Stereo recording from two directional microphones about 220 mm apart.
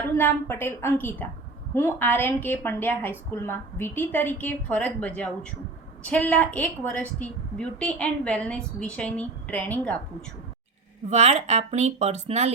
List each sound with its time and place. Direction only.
0.2 s a woman's voice: 10° left (ahead or behind)
11.1 s speech: 30° right (ahead or behind)